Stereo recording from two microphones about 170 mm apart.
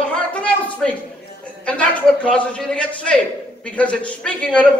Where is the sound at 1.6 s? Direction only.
5° left (ahead or behind).